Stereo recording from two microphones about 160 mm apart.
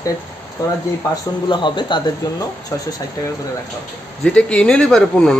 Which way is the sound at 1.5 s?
30° left (ahead or behind).